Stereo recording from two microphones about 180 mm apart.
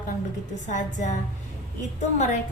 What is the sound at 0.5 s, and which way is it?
A woman's voice, 45° left (ahead or behind).